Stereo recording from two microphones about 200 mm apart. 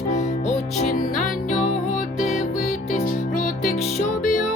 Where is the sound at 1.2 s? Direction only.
40° left (ahead or behind).